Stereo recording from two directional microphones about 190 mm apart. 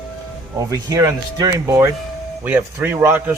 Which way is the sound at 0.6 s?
15° right (ahead or behind).